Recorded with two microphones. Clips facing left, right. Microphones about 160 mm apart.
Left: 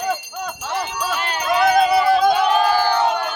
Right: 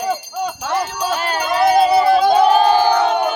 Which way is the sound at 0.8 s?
40° right (ahead or behind).